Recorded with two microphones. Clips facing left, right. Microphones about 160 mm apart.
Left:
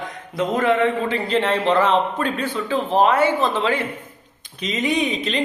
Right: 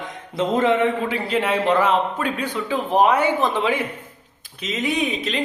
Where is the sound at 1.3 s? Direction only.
10° right (ahead or behind).